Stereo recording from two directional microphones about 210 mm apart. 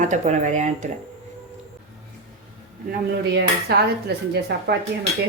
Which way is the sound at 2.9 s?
50° right (ahead or behind).